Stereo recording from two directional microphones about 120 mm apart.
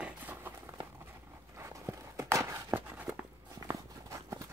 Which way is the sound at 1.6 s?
25° right (ahead or behind).